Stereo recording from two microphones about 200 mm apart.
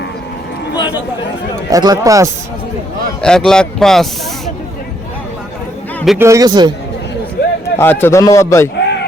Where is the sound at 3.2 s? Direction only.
5° left (ahead or behind).